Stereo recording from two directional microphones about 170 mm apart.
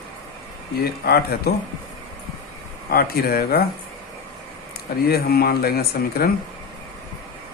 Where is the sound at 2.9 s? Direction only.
60° left (ahead or behind).